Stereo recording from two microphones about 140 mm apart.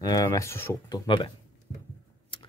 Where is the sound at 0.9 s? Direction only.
35° left (ahead or behind).